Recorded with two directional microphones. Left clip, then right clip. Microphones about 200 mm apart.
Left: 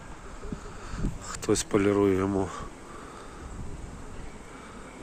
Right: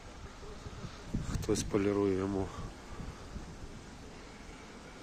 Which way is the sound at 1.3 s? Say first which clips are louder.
Left 7 dB; centre (ahead or behind).